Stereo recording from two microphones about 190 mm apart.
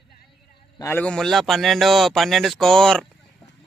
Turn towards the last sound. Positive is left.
turn(degrees=5)  # may be behind; listen again after turning